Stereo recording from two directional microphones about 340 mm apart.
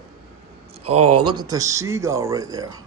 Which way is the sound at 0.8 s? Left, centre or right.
Right.